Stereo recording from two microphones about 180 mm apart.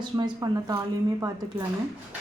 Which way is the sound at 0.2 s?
20° right (ahead or behind).